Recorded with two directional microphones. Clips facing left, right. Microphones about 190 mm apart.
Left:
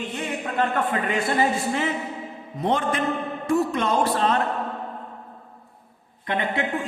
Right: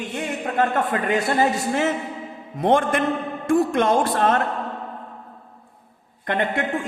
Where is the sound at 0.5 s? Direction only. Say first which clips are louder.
Right 2 dB; 45° right (ahead or behind).